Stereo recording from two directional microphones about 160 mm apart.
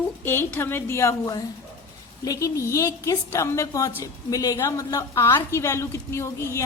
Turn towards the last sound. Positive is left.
turn(degrees=15)  # may be behind; listen again after turning